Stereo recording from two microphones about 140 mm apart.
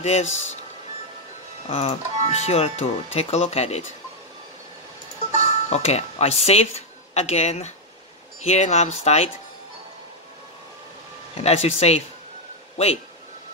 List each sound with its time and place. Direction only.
0.0 s speech: 50° left (ahead or behind)
1.7 s speech: 50° left (ahead or behind)
5.7 s speech: 50° left (ahead or behind)
11.3 s speech: 50° left (ahead or behind)